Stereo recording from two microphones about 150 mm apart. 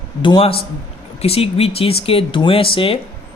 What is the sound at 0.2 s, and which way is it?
A man's voice, 35° left (ahead or behind).